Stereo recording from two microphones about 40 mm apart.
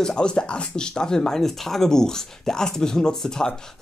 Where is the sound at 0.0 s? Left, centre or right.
Left.